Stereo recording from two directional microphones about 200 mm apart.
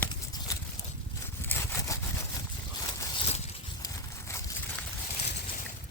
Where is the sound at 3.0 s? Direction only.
30° left (ahead or behind).